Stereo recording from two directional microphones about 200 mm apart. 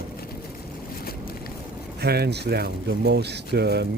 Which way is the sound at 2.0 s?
55° right (ahead or behind).